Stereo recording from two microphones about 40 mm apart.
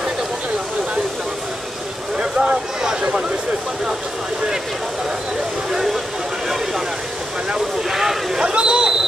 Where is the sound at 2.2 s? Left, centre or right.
Right.